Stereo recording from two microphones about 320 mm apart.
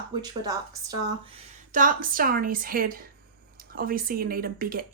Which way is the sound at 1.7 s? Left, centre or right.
Right.